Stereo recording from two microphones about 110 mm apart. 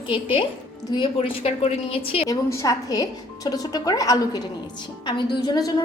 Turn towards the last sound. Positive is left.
turn(degrees=40)  # may be behind; listen again after turning